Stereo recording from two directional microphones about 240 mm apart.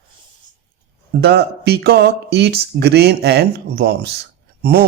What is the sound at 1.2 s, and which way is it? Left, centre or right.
Speech, right.